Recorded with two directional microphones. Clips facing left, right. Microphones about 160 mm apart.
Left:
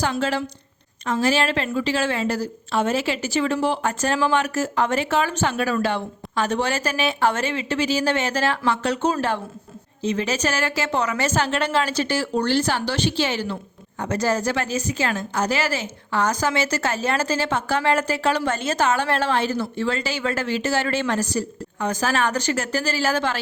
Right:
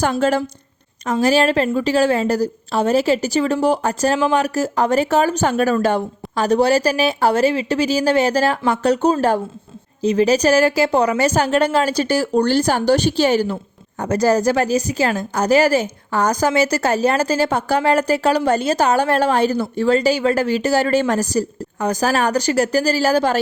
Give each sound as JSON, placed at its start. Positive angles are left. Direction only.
{"t": 0.0, "sound": "a woman's voice", "side_deg": -45}